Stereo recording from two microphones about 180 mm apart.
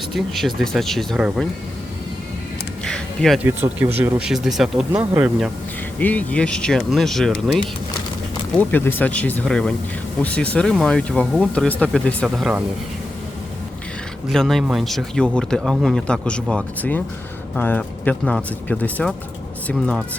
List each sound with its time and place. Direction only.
0.1 s speech: centre (ahead or behind)
2.8 s a sound: 5° left (ahead or behind)
3.4 s speech: 10° right (ahead or behind)
6.0 s speech: 10° left (ahead or behind)
8.5 s speech: 10° left (ahead or behind)
14.3 s speech: centre (ahead or behind)